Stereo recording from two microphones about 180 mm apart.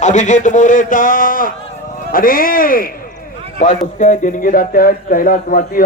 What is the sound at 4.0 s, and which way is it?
A man's voice, 45° left (ahead or behind).